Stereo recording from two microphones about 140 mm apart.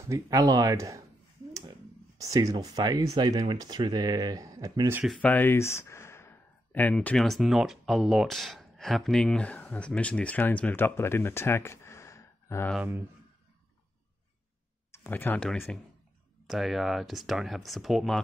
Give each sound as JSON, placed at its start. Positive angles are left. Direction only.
{"t": 0.1, "sound": "speech", "side_deg": -25}
{"t": 5.2, "sound": "speech", "side_deg": 15}
{"t": 14.9, "sound": "speech", "side_deg": 15}
{"t": 16.4, "sound": "speech", "side_deg": 0}